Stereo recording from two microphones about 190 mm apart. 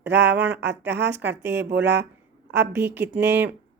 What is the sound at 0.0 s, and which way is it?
Speech, 65° right (ahead or behind).